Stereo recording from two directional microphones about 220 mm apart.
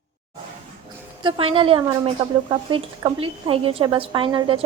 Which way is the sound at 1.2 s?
25° right (ahead or behind).